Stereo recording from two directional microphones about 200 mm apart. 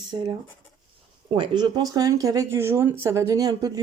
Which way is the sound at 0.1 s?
20° right (ahead or behind).